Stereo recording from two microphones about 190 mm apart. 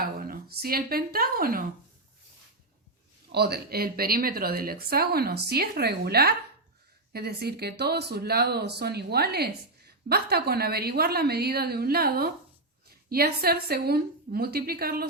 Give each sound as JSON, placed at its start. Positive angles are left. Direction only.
{"t": 0.0, "sound": "speech", "side_deg": -50}
{"t": 3.3, "sound": "a woman's voice", "side_deg": -55}